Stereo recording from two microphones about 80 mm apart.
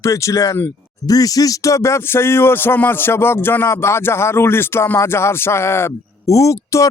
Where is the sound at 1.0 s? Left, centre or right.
Left.